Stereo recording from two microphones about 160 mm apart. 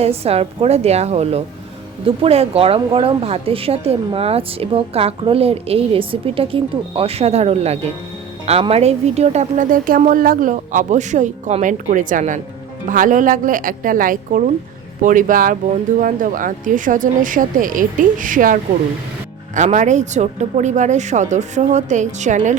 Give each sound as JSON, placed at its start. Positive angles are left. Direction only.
{"t": 0.0, "sound": "a woman's voice", "side_deg": -40}